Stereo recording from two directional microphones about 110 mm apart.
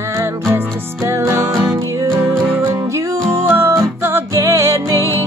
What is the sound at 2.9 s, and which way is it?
Music, 25° right (ahead or behind).